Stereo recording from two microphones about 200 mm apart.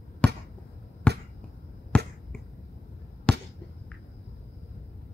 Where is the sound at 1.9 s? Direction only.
5° left (ahead or behind).